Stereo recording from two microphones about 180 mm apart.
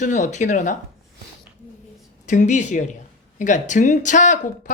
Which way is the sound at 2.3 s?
40° left (ahead or behind).